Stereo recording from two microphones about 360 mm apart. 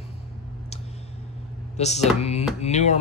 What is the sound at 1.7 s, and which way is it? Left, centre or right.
Speech, centre.